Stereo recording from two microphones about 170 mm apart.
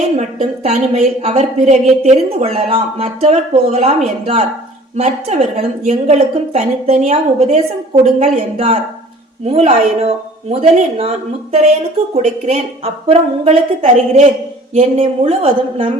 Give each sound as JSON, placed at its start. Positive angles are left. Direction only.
{"t": 0.2, "sound": "a woman's voice", "side_deg": -40}
{"t": 4.9, "sound": "a woman's voice", "side_deg": -40}